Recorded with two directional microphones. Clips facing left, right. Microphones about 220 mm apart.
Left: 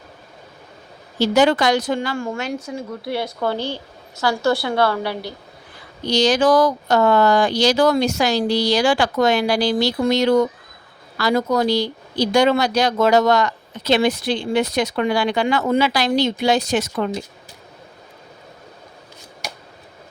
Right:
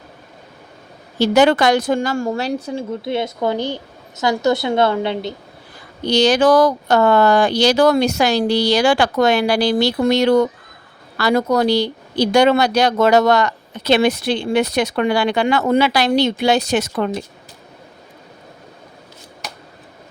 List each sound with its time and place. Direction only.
1.2 s speech: 65° right (ahead or behind); by 2.8 s 35° right (ahead or behind)
3.0 s a woman's voice: 20° right (ahead or behind)
6.1 s speech: 60° right (ahead or behind)